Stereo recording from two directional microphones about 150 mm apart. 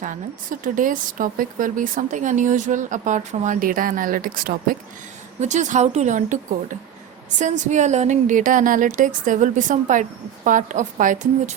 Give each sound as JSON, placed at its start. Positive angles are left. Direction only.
{"t": 0.0, "sound": "speech", "side_deg": -60}
{"t": 5.4, "sound": "speech", "side_deg": -50}